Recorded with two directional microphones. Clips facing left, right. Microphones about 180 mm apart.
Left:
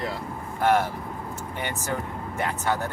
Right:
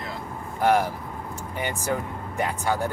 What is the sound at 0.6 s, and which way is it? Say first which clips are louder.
Speech: right 1 dB; 15° right (ahead or behind).